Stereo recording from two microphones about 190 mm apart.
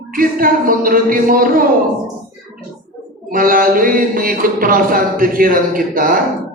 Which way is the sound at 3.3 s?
50° right (ahead or behind).